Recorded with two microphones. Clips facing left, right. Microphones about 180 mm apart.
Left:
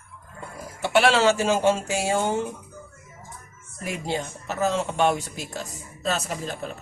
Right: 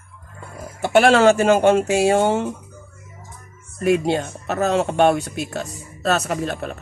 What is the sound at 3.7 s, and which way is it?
Speech, 65° right (ahead or behind).